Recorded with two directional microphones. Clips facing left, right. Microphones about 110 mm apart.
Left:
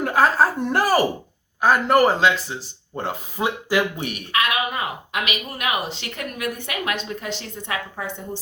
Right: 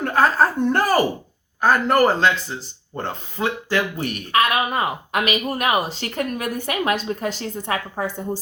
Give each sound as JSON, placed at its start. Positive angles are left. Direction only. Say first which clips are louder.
{"t": 0.0, "sound": "speech", "louder": "even", "side_deg": 0}
{"t": 4.3, "sound": "speech", "louder": "right 4 dB", "side_deg": -35}